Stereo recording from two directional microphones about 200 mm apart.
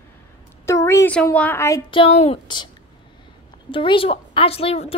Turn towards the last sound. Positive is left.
turn(degrees=30)  # may be behind; listen again after turning